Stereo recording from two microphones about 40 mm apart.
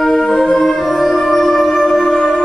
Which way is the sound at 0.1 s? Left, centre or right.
Centre.